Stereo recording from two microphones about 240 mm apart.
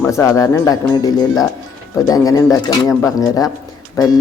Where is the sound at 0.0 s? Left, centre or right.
Centre.